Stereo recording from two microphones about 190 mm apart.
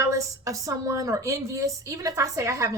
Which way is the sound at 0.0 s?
15° right (ahead or behind).